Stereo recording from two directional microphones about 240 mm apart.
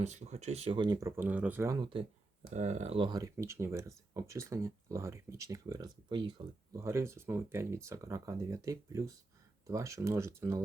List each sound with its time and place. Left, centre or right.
0.0 s speech: right; by 10.6 s centre